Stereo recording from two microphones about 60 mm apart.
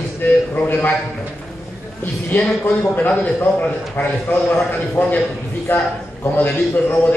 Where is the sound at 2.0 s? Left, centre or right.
Left.